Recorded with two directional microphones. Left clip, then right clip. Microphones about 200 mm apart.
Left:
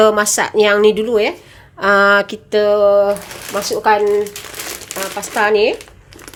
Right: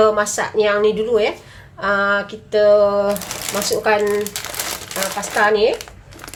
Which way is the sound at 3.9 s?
35° left (ahead or behind).